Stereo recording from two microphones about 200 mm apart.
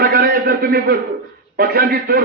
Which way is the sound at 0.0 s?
50° right (ahead or behind).